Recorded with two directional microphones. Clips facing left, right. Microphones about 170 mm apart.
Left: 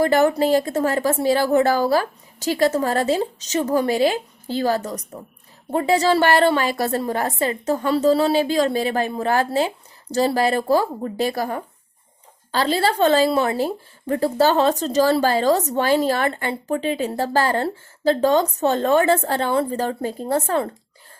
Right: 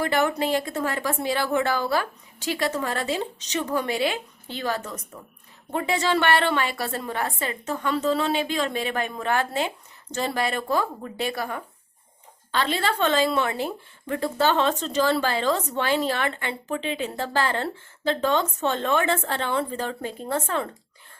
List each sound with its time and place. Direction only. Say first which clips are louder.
0.0 s speech: left 7 dB; 40° left (ahead or behind)